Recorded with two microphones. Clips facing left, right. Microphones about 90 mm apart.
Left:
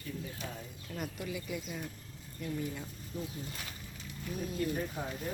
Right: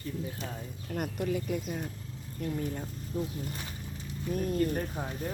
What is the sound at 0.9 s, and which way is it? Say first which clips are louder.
Speech: right 8 dB; 55° right (ahead or behind).